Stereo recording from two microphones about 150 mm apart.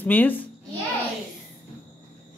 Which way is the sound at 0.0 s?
10° left (ahead or behind).